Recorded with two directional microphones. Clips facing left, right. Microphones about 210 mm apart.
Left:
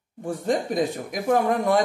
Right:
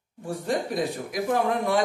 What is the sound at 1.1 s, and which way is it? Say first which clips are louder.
Speech: left 3 dB; 45° left (ahead or behind).